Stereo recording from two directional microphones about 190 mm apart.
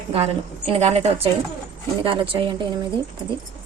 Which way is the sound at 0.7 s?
35° right (ahead or behind).